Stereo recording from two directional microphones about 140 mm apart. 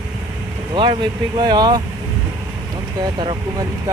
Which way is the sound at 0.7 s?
35° right (ahead or behind).